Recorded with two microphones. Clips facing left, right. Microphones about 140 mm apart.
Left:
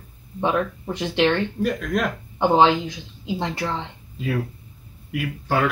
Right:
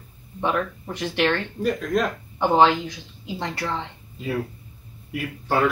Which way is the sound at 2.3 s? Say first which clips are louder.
Left 1 dB; 20° left (ahead or behind).